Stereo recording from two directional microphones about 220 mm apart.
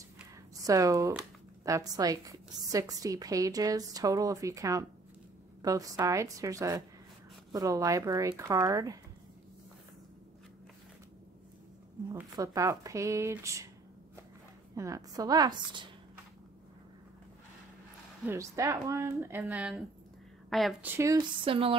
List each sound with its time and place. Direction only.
0.7 s a woman's voice: 15° right (ahead or behind)
12.1 s a woman's voice: 15° right (ahead or behind)
14.8 s a woman's voice: 15° right (ahead or behind)
18.2 s a woman's voice: 10° right (ahead or behind)
21.5 s speech: 25° right (ahead or behind)